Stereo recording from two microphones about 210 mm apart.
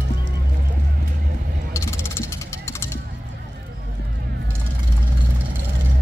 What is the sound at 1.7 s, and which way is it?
Jackhammer, 10° left (ahead or behind).